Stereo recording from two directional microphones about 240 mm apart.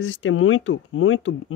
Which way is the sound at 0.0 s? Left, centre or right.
Left.